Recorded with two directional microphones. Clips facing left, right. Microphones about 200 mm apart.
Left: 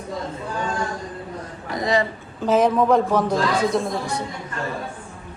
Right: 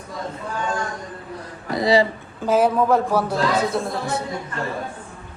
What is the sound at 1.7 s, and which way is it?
Speech, 35° right (ahead or behind).